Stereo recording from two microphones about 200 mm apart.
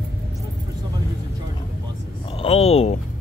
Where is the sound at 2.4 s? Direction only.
30° left (ahead or behind).